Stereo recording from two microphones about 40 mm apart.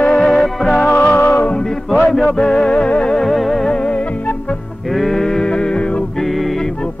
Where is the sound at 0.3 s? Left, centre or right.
Centre.